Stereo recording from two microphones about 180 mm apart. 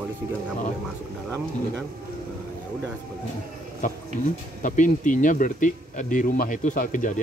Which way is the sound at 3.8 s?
45° left (ahead or behind).